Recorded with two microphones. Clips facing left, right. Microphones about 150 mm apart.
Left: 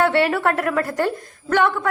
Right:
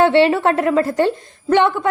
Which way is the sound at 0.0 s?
25° right (ahead or behind).